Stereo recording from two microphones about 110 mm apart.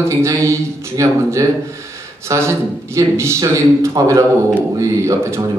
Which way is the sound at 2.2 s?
25° right (ahead or behind).